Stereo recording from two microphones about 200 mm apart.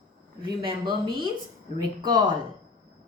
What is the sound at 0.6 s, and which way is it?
Speech, 25° right (ahead or behind).